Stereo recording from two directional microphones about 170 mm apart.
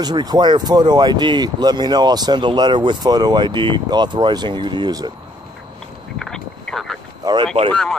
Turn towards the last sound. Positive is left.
turn(degrees=5)  # may be behind; listen again after turning